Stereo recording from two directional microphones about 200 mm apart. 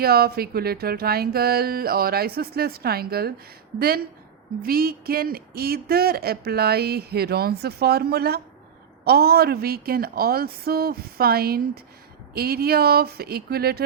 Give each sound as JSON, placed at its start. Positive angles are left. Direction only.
{"t": 0.0, "sound": "speech", "side_deg": -50}